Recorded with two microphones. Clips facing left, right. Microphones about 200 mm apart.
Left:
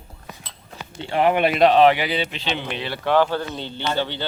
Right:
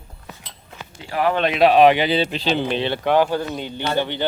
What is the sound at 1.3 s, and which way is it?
Speech, 10° left (ahead or behind).